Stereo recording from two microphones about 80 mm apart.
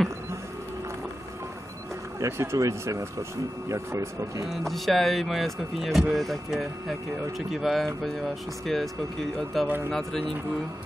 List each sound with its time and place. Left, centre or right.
2.1 s speech: right
4.5 s speech: centre